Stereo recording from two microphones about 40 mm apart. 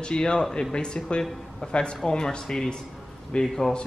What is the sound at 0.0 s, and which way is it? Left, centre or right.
Speech, left.